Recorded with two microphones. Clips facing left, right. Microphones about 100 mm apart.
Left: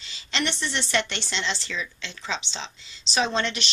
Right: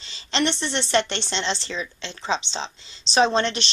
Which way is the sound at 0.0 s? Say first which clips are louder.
Right 5 dB; 30° right (ahead or behind).